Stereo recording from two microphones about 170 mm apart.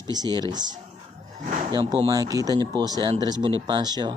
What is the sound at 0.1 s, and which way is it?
Speech, 25° right (ahead or behind).